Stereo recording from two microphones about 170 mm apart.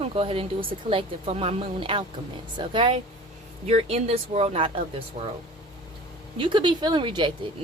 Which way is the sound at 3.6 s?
40° right (ahead or behind).